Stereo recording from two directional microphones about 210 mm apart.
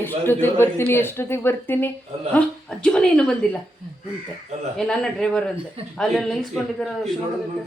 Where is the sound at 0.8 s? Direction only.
10° left (ahead or behind).